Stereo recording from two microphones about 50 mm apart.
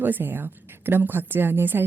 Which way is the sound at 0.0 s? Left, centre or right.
Right.